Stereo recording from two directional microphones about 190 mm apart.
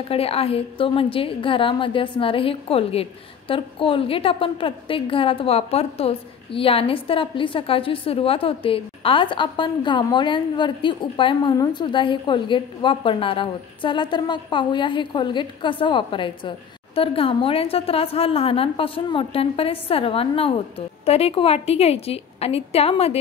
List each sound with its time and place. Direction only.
0.1 s a woman's voice: 30° left (ahead or behind)